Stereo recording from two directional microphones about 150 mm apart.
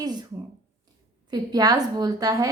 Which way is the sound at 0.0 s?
30° right (ahead or behind).